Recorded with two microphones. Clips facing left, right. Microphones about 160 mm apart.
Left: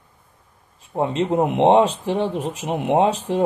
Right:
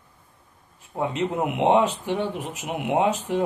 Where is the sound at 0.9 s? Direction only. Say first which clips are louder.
Left 5 dB; 35° left (ahead or behind).